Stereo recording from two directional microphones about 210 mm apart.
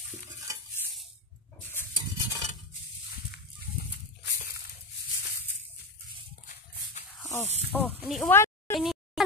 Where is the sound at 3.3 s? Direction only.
50° left (ahead or behind).